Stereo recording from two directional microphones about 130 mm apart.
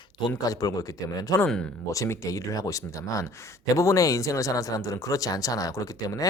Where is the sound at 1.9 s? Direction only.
20° left (ahead or behind).